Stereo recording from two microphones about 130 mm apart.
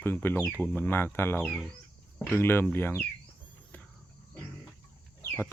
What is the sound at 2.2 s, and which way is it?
Speech, 15° left (ahead or behind).